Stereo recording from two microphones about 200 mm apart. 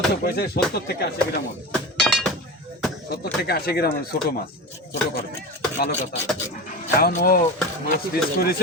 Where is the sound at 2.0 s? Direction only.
Centre (ahead or behind).